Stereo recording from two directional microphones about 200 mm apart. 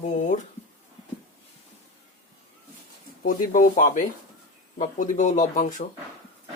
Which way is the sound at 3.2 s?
40° left (ahead or behind).